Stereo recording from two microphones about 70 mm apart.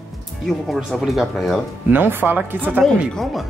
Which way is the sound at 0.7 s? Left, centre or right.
Centre.